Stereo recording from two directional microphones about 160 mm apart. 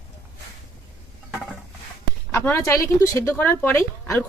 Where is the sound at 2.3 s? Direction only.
15° left (ahead or behind).